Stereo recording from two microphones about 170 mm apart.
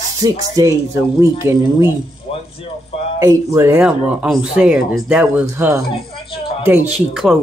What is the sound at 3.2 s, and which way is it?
Speech, 20° right (ahead or behind).